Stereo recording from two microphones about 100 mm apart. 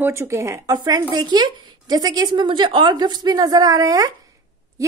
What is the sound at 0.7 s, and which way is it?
A woman's voice, 40° right (ahead or behind).